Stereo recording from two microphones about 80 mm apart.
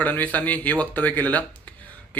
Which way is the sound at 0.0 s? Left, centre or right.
Left.